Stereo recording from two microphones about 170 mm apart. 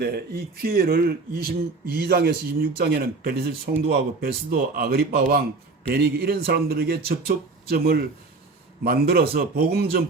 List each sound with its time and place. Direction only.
0.0 s speech: 65° right (ahead or behind)